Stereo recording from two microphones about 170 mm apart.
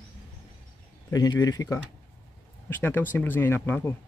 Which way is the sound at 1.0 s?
20° left (ahead or behind).